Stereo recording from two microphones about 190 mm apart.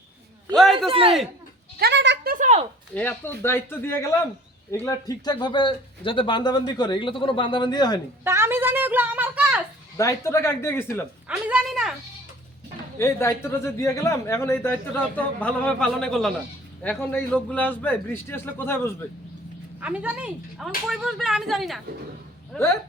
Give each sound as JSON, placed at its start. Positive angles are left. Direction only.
{"t": 0.9, "sound": "a man's voice", "side_deg": -30}
{"t": 1.8, "sound": "speech", "side_deg": -65}
{"t": 2.3, "sound": "a child's voice", "side_deg": -40}
{"t": 2.9, "sound": "speech", "side_deg": 10}
{"t": 8.2, "sound": "a woman's voice", "side_deg": -10}
{"t": 10.0, "sound": "speech", "side_deg": 15}
{"t": 11.3, "sound": "speech", "side_deg": -5}
{"t": 13.0, "sound": "speech", "side_deg": 15}
{"t": 19.8, "sound": "speech", "side_deg": -5}